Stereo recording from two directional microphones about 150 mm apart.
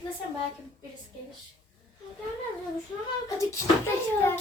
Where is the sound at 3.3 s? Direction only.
20° left (ahead or behind).